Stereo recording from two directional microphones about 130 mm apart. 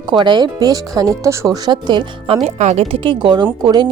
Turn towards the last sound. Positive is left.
turn(degrees=-30)  # may be behind; listen again after turning